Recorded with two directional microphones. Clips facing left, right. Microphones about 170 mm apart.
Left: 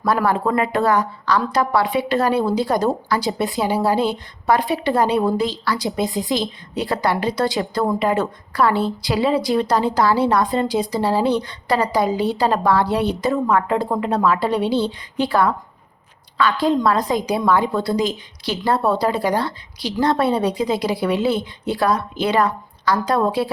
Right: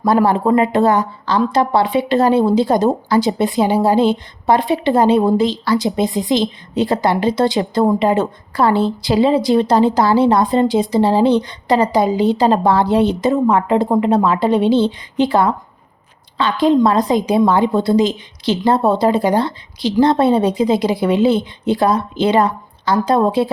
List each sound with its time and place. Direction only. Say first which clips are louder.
0.0 s a woman's voice: right 5 dB; 25° right (ahead or behind)